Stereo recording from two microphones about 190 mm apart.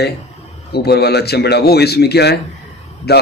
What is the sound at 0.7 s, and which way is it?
A man's voice, 60° left (ahead or behind).